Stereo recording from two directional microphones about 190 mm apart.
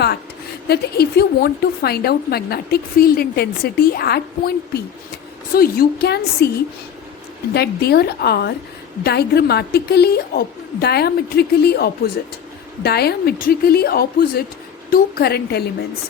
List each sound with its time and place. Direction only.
0.7 s a woman's voice: 55° left (ahead or behind)
7.5 s a woman's voice: 55° left (ahead or behind)